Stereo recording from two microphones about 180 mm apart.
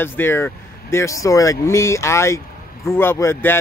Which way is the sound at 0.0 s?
15° left (ahead or behind).